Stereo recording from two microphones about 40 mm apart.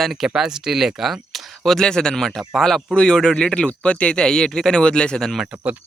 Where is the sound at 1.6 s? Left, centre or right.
Centre; by 5.2 s left.